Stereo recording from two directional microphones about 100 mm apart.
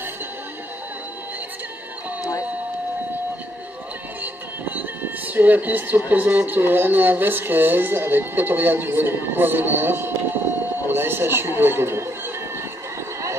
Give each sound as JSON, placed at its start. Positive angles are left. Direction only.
{"t": 4.2, "sound": "speech", "side_deg": -15}